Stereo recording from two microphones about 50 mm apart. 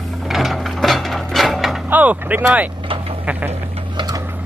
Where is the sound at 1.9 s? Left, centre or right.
Right.